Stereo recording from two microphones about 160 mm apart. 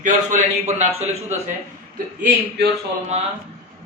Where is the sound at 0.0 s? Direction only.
50° right (ahead or behind).